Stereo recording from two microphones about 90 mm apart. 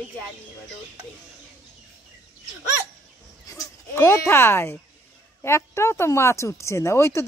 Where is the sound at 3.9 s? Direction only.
30° left (ahead or behind).